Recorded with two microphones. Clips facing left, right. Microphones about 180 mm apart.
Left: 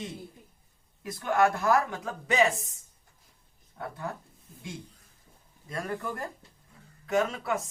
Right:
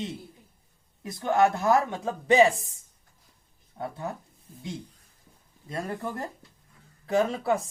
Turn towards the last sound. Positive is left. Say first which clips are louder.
# right 3 dB
turn(degrees=-35)  # may be behind; listen again after turning